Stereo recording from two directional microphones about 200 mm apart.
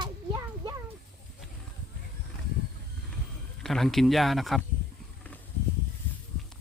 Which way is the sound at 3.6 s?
Centre (ahead or behind).